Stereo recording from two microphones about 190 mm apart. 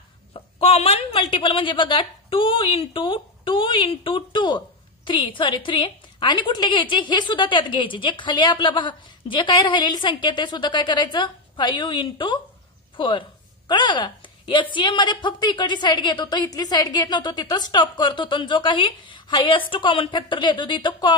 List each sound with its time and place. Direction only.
0.3 s a woman's voice: 30° left (ahead or behind)